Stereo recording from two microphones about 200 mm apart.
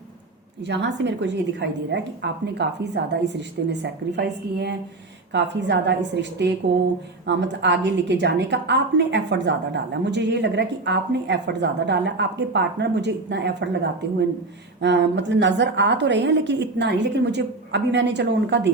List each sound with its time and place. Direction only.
0.6 s a woman's voice: 60° right (ahead or behind)
14.8 s a woman's voice: 60° right (ahead or behind)